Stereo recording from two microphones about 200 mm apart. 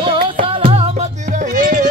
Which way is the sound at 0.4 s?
30° right (ahead or behind).